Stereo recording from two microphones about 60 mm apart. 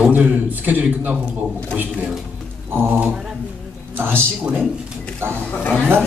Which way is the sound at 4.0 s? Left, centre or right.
Right.